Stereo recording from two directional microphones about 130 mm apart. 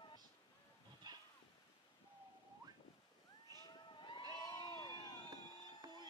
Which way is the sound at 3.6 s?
35° left (ahead or behind).